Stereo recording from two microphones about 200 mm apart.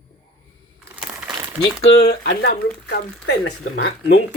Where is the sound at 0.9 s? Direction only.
5° right (ahead or behind).